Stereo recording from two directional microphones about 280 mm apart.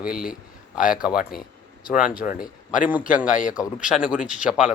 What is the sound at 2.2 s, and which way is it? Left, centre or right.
Speech, left.